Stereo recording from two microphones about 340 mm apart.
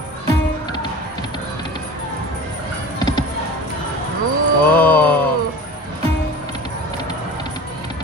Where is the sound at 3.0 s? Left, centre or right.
Centre.